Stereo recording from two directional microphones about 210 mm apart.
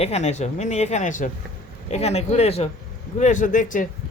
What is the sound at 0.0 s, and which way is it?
Speech, 30° left (ahead or behind).